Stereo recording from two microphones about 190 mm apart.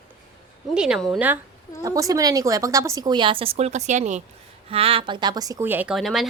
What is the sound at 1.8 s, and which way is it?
A woman's voice, 20° right (ahead or behind).